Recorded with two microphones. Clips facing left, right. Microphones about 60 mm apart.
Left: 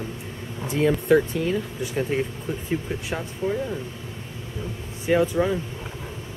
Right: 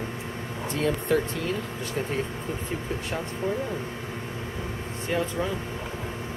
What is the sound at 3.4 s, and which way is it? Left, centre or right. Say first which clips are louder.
Speech: left 3 dB; right.